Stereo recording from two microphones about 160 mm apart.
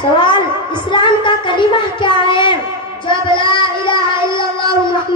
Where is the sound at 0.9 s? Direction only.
30° left (ahead or behind).